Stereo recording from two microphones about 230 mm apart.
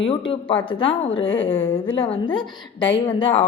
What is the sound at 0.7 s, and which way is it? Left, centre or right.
Speech, left.